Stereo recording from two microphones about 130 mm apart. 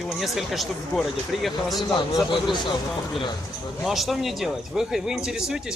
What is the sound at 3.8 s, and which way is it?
Speech, centre (ahead or behind).